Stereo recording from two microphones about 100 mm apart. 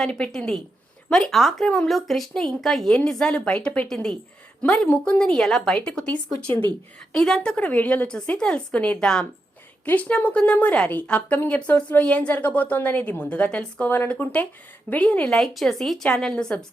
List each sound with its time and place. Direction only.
0.0 s a woman's voice: 5° left (ahead or behind)